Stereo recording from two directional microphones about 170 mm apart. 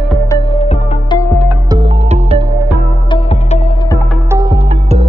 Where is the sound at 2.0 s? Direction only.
35° right (ahead or behind).